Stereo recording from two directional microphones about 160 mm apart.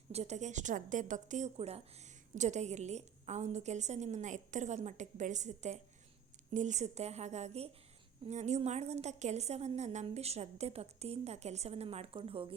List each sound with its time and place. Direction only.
0.1 s a woman's voice: 40° right (ahead or behind)